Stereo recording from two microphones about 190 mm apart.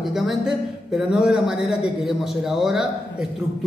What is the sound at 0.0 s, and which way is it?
A man's voice, centre (ahead or behind).